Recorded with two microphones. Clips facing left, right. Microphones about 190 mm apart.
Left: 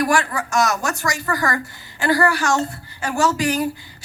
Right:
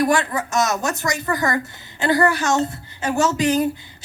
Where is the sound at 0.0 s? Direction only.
20° right (ahead or behind).